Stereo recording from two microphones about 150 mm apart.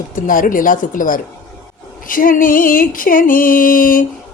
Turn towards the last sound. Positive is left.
turn(degrees=65)  # may be behind; listen again after turning